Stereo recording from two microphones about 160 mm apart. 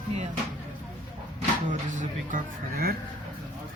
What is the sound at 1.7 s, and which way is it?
Speech, 50° right (ahead or behind).